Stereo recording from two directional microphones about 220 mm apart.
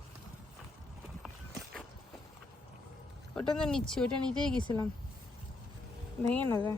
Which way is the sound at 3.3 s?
5° left (ahead or behind).